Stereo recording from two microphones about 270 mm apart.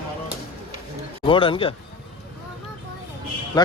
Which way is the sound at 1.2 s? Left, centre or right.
Centre.